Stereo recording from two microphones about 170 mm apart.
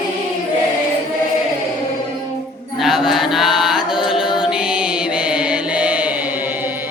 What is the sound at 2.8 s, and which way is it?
Chant, centre (ahead or behind).